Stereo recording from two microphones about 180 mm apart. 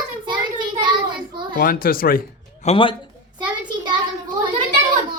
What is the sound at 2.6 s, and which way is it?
Speech, 30° left (ahead or behind).